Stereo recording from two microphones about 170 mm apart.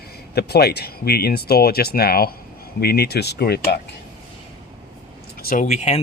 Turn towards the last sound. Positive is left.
turn(degrees=45)  # may be behind; listen again after turning